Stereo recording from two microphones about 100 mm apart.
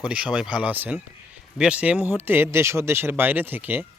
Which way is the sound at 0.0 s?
10° right (ahead or behind).